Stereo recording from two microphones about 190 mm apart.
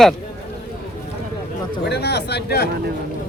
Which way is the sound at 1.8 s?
60° left (ahead or behind).